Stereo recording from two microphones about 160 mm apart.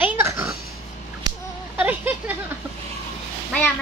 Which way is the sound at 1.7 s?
10° right (ahead or behind).